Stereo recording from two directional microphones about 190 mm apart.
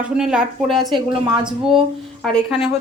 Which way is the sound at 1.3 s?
25° right (ahead or behind).